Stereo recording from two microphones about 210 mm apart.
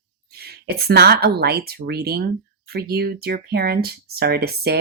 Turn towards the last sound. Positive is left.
turn(degrees=-50)  # may be behind; listen again after turning